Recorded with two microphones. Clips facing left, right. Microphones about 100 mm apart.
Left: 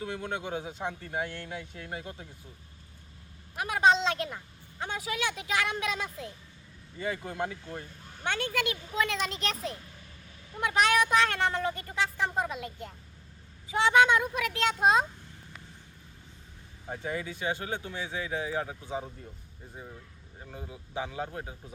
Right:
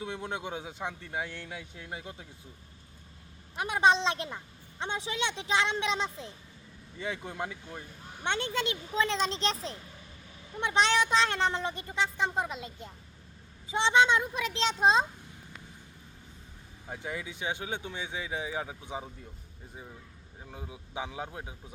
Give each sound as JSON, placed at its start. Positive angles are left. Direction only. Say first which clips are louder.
{"t": 0.2, "sound": "speech", "louder": "left 2 dB", "side_deg": -20}
{"t": 0.6, "sound": "speech", "louder": "left 2 dB", "side_deg": 0}
{"t": 1.3, "sound": "speech", "louder": "left 3 dB", "side_deg": -10}
{"t": 3.6, "sound": "speech", "louder": "left 1 dB", "side_deg": -25}
{"t": 7.3, "sound": "speech", "louder": "left 3 dB", "side_deg": -10}
{"t": 8.2, "sound": "speech", "louder": "even", "side_deg": -25}
{"t": 10.6, "sound": "speech", "louder": "left 1 dB", "side_deg": -25}
{"t": 17.0, "sound": "speech", "louder": "left 3 dB", "side_deg": -15}
{"t": 20.5, "sound": "speech", "louder": "left 2 dB", "side_deg": -15}